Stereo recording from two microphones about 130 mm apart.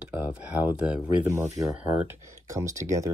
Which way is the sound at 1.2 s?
25° right (ahead or behind).